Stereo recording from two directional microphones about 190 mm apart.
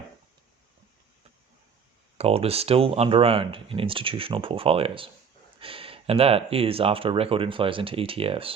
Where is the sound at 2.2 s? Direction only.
30° right (ahead or behind).